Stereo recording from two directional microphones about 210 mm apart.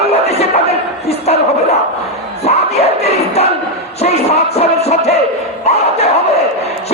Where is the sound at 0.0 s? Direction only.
30° left (ahead or behind).